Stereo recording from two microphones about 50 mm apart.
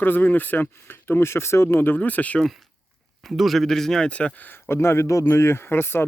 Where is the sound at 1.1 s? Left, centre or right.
Left.